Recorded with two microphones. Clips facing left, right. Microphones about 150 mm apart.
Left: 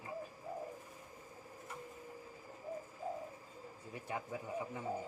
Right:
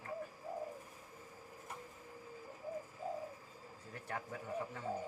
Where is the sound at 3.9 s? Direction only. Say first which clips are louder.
Left 2 dB; 15° left (ahead or behind).